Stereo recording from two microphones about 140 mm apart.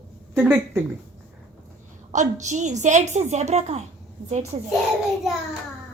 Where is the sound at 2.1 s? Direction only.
60° right (ahead or behind); by 4.7 s 40° right (ahead or behind).